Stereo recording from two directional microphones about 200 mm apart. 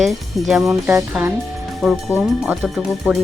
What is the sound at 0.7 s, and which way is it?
Music, 5° right (ahead or behind).